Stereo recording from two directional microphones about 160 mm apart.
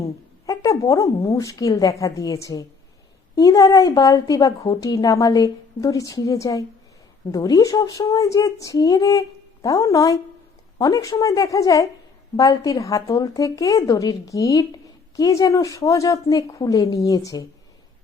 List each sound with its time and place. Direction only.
0.4 s a woman's voice: 20° left (ahead or behind)